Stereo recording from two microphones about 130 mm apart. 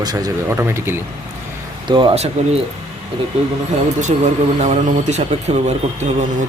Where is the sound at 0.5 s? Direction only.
20° right (ahead or behind).